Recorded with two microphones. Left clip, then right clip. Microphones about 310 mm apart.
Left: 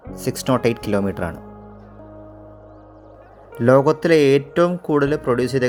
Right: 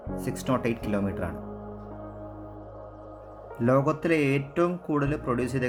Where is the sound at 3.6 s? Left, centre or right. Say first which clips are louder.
Left 10 dB; left.